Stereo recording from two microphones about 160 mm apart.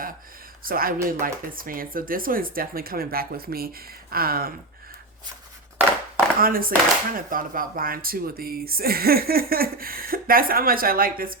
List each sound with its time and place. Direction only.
0.6 s speech: 65° right (ahead or behind)
6.4 s speech: 65° right (ahead or behind)